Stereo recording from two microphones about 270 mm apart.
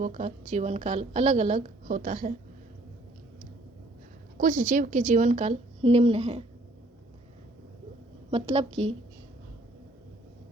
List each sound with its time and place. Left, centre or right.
0.0 s a woman's voice: right
4.4 s a woman's voice: right
8.3 s a woman's voice: right